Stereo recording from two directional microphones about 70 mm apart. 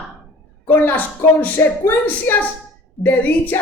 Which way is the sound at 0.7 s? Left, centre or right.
Left.